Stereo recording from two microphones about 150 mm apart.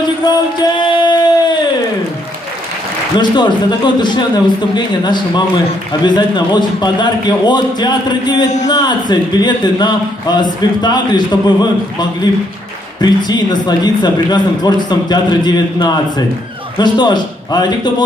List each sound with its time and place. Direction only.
0.2 s a sound: 30° left (ahead or behind)
3.2 s a man's voice: 30° left (ahead or behind)
13.0 s a man's voice: 30° left (ahead or behind)